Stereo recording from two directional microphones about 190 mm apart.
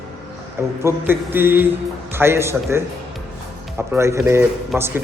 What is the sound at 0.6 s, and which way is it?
A man's voice, 15° right (ahead or behind).